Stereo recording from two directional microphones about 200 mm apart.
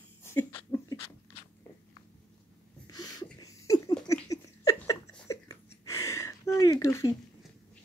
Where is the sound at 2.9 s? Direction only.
20° left (ahead or behind).